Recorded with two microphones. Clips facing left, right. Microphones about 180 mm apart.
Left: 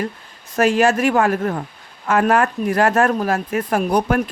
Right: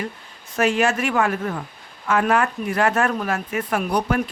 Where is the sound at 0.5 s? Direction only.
40° left (ahead or behind).